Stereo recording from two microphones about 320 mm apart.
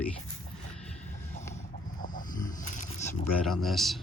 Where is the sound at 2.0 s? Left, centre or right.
Left.